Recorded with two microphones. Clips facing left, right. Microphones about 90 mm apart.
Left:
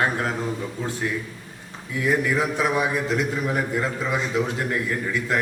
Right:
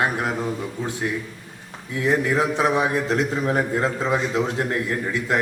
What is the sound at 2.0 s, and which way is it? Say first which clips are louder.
A man's voice: right 2 dB; 25° right (ahead or behind).